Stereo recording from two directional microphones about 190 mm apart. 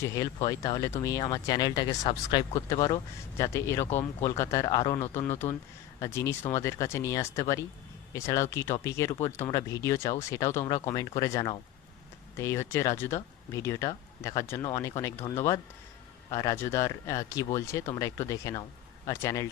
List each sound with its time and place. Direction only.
0.0 s speech: 15° left (ahead or behind)